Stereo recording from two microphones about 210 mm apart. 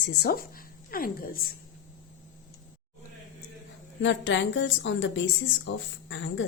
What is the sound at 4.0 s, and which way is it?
A woman's voice, 65° left (ahead or behind).